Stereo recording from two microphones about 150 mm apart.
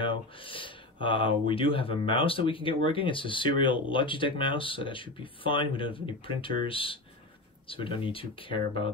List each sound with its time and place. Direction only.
0.0 s speech: 35° left (ahead or behind)